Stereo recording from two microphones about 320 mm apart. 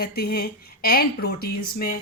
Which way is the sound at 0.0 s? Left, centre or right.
Left.